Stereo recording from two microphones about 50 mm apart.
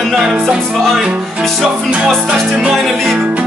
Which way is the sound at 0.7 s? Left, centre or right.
Centre.